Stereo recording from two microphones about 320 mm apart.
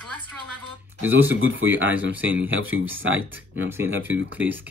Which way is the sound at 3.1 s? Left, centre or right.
Centre.